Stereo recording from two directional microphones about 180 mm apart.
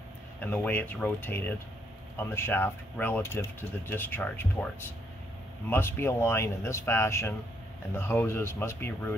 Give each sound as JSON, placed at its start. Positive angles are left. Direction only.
{"t": 0.4, "sound": "speech", "side_deg": 10}
{"t": 5.7, "sound": "speech", "side_deg": 10}